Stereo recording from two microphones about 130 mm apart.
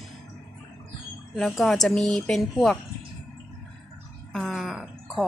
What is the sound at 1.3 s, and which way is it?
A woman's voice, centre (ahead or behind).